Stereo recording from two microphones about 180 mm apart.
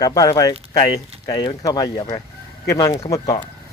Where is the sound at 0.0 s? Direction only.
20° left (ahead or behind).